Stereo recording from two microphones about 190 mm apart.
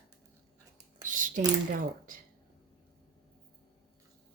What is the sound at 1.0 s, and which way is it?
Speech, 45° right (ahead or behind).